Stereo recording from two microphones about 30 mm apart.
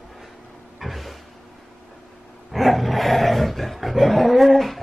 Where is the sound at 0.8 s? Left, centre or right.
Centre.